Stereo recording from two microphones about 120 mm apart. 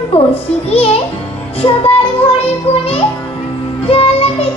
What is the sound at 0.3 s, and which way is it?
Speech, 55° left (ahead or behind).